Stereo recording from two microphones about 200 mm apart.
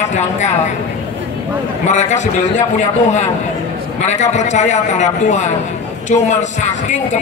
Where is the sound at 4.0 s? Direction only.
35° left (ahead or behind).